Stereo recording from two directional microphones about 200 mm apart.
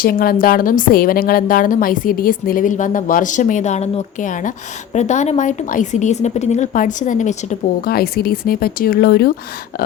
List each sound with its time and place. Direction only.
0.0 s a woman's voice: 45° left (ahead or behind)
7.8 s a woman's voice: 50° left (ahead or behind)